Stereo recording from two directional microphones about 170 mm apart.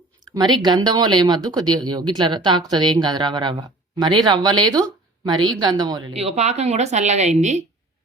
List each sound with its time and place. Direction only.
0.3 s speech: 25° right (ahead or behind)
6.1 s speech: 40° right (ahead or behind)